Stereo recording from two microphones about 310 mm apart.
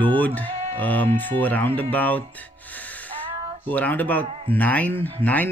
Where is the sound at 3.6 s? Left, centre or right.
Centre.